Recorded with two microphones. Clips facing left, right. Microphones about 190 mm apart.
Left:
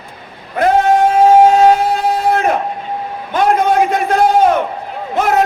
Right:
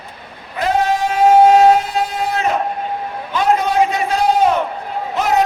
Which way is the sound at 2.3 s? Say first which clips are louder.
Left 4 dB; 55° left (ahead or behind).